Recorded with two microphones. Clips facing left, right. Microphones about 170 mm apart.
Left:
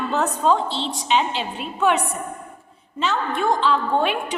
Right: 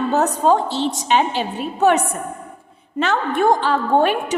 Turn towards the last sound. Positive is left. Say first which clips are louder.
# right 3 dB
turn(degrees=-45)  # may be behind; listen again after turning